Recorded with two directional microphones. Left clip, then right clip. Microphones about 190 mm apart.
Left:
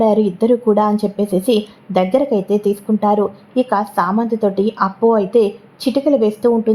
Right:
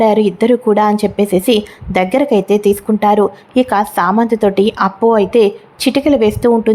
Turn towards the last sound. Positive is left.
turn(degrees=-20)  # may be behind; listen again after turning